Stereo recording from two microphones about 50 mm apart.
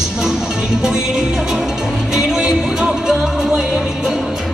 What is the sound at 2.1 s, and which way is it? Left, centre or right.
Music, centre.